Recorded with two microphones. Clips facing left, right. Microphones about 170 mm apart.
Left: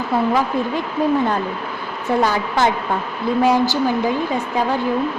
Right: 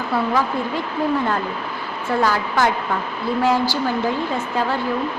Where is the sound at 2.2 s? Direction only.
20° left (ahead or behind).